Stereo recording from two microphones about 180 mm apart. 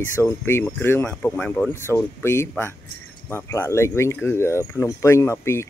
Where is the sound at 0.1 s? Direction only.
15° left (ahead or behind).